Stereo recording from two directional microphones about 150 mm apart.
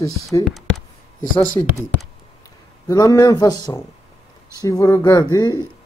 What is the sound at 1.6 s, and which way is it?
Speech, 25° left (ahead or behind).